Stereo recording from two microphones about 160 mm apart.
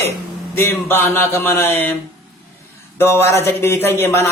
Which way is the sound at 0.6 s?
15° left (ahead or behind).